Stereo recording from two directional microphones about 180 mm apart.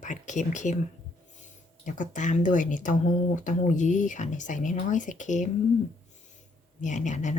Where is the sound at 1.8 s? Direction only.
45° left (ahead or behind).